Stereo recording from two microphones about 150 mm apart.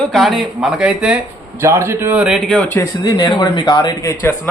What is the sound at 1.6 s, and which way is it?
A man's voice, 15° right (ahead or behind).